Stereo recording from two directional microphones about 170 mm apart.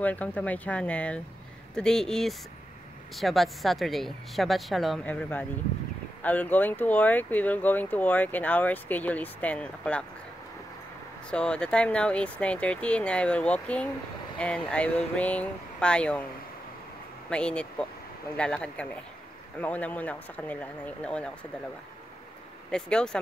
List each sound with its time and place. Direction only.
0.0 s speech: 10° left (ahead or behind)
11.2 s speech: 5° left (ahead or behind)
17.3 s speech: 5° left (ahead or behind)
22.7 s speech: 5° left (ahead or behind)